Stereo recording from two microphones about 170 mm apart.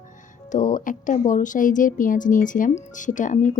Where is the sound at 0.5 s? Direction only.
50° left (ahead or behind).